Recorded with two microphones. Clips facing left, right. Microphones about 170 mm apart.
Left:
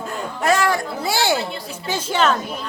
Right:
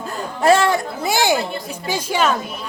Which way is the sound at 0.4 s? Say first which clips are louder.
Right 4 dB; 25° right (ahead or behind).